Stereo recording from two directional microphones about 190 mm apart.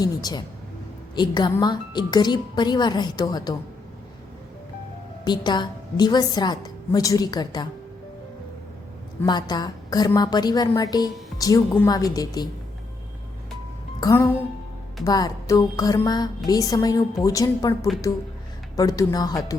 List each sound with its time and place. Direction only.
0.0 s a woman's voice: 20° left (ahead or behind)
5.2 s a woman's voice: 20° left (ahead or behind)
9.2 s a woman's voice: 20° left (ahead or behind)
14.0 s a woman's voice: 15° left (ahead or behind)
18.8 s a woman's voice: 20° left (ahead or behind)